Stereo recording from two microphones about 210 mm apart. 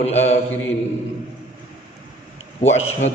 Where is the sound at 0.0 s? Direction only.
30° left (ahead or behind).